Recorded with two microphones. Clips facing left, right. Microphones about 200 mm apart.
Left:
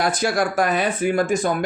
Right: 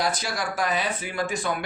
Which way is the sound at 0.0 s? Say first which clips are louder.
Left 7 dB; 50° left (ahead or behind).